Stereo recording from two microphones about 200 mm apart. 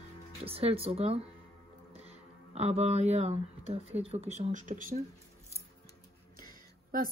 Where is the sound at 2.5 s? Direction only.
30° right (ahead or behind).